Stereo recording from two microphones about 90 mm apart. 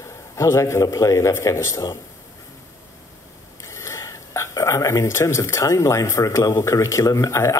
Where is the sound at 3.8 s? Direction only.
30° left (ahead or behind).